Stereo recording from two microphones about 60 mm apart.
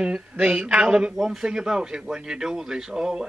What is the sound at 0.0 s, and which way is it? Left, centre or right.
Speech, centre.